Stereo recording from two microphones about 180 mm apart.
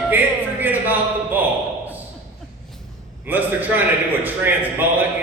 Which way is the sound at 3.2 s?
10° right (ahead or behind).